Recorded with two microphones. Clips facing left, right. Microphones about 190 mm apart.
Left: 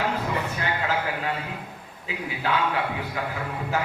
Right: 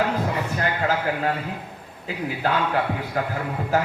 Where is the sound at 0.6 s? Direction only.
45° right (ahead or behind).